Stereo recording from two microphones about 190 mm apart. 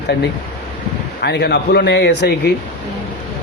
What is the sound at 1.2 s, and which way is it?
A man's voice, 60° left (ahead or behind).